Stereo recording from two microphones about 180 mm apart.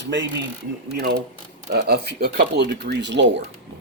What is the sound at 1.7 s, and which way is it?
Speech, 60° right (ahead or behind).